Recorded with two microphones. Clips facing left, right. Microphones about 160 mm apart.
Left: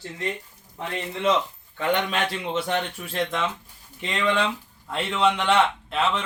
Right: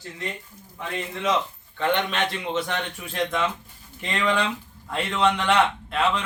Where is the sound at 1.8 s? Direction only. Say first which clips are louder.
Even; 5° left (ahead or behind).